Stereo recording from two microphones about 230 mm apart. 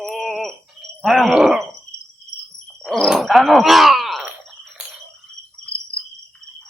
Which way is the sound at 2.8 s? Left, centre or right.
Centre.